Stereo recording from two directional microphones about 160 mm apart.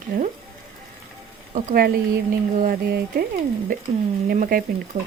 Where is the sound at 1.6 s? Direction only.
65° right (ahead or behind).